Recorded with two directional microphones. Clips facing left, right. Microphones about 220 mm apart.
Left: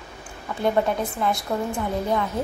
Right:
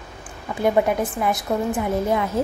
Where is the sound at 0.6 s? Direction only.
15° right (ahead or behind).